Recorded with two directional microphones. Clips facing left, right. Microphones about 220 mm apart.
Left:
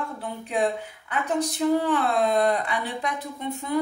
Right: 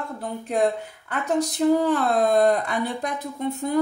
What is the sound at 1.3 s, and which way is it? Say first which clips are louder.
Speech: right 3 dB; 40° right (ahead or behind).